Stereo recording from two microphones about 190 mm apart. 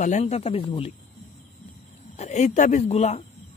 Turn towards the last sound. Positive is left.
turn(degrees=35)  # may be behind; listen again after turning